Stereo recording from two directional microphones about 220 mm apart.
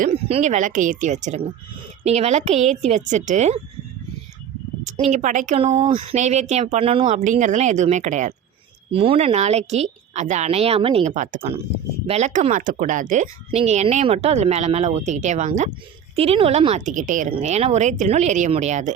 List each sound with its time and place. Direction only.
0.0 s speech: 30° right (ahead or behind)
4.9 s a woman's voice: 30° right (ahead or behind)